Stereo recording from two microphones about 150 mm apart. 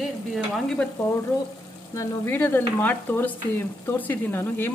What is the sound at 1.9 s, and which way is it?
Speech, 15° left (ahead or behind).